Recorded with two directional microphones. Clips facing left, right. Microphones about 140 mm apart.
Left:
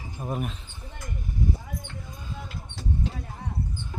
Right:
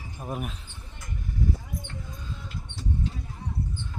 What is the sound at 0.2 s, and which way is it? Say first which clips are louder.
Speech: left 3 dB; centre (ahead or behind).